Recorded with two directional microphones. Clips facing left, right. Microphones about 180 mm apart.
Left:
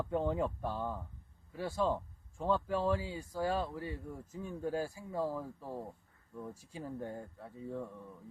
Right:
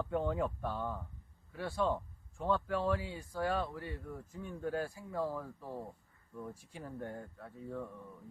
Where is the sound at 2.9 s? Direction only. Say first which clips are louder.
Left 1 dB; 30° left (ahead or behind).